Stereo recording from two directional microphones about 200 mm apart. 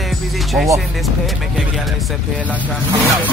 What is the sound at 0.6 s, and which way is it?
Speech, 5° right (ahead or behind).